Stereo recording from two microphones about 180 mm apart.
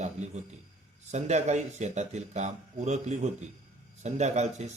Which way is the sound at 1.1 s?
40° right (ahead or behind).